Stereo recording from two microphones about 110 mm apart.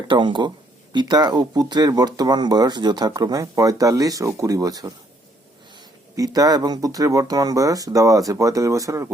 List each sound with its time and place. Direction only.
0.1 s speech: 45° right (ahead or behind)
6.1 s speech: 35° right (ahead or behind)